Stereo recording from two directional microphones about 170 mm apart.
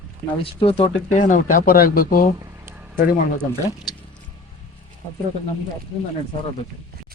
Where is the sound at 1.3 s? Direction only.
55° left (ahead or behind).